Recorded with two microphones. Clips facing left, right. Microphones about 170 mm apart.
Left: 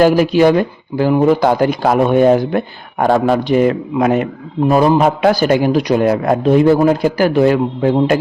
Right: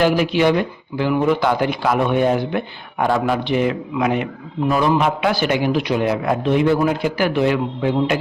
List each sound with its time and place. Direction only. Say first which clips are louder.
0.0 s speech: left 6 dB; 40° left (ahead or behind)